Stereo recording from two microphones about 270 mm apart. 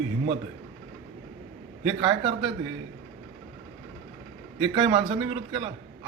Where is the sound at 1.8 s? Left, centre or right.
Centre.